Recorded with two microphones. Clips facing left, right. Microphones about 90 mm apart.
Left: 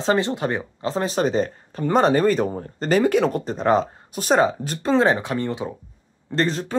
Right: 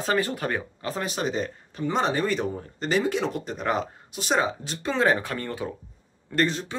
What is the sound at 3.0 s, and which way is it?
Speech, 55° left (ahead or behind).